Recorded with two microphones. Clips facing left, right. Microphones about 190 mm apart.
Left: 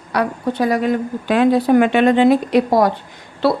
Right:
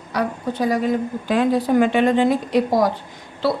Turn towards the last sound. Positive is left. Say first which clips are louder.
# left 4 dB
turn(degrees=65)  # may be behind; listen again after turning